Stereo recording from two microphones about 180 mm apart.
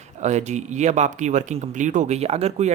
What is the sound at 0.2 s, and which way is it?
Speech, 40° right (ahead or behind).